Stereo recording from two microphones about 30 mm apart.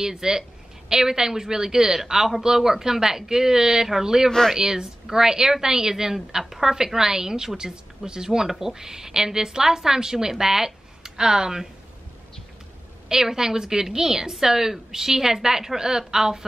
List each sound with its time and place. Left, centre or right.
0.0 s a woman's voice: centre
13.1 s a woman's voice: centre